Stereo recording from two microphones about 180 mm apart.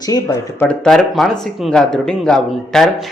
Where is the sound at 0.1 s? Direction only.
20° left (ahead or behind).